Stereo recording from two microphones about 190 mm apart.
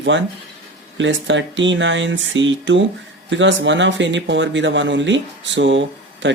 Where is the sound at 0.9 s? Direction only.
75° right (ahead or behind).